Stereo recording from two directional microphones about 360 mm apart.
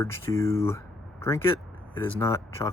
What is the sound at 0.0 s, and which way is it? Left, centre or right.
Speech, centre.